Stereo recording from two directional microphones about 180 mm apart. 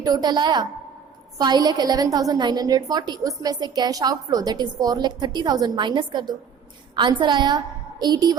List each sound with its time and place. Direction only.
0.0 s a woman's voice: 20° right (ahead or behind)